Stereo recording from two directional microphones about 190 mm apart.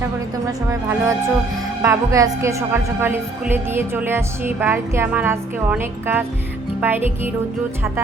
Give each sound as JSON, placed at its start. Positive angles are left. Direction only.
{"t": 0.4, "sound": "a woman's voice", "side_deg": -15}